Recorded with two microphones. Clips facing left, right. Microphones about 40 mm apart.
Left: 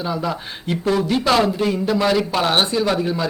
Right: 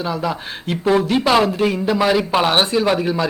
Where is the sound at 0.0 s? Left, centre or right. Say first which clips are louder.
Right 1 dB; centre.